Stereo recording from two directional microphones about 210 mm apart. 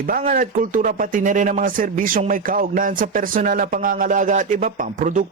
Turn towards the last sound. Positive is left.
turn(degrees=-40)  # may be behind; listen again after turning